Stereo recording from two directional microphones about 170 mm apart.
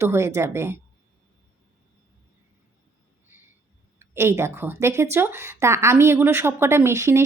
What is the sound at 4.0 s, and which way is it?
Speech, 15° right (ahead or behind).